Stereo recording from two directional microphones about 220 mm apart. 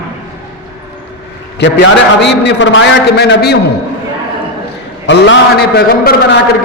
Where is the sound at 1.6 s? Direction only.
50° left (ahead or behind).